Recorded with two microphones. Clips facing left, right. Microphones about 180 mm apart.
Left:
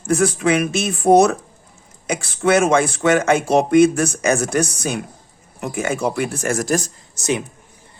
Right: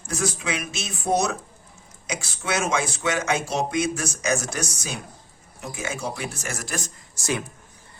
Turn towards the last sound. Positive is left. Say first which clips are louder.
# left 6 dB
turn(degrees=20)  # may be behind; listen again after turning